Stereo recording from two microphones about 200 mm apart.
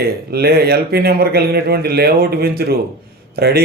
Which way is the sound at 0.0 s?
50° right (ahead or behind).